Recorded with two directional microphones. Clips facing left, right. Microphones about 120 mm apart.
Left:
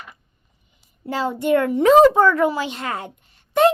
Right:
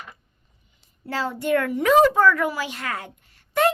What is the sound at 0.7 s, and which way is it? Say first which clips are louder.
A child's voice: left 3 dB; 20° left (ahead or behind).